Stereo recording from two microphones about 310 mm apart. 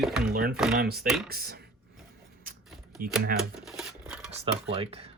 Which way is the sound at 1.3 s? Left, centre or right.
Right.